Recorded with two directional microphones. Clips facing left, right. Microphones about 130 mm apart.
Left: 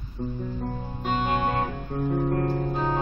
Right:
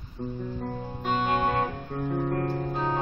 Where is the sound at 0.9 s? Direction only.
Centre (ahead or behind).